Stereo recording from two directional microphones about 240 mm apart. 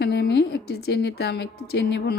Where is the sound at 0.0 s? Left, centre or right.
Left.